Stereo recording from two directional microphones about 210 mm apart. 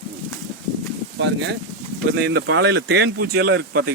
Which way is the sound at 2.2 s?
55° right (ahead or behind).